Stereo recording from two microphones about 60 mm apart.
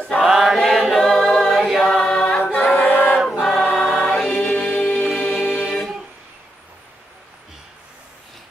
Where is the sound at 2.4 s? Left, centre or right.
Left.